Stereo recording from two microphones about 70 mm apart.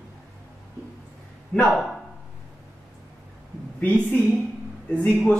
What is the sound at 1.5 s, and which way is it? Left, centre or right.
Speech, centre.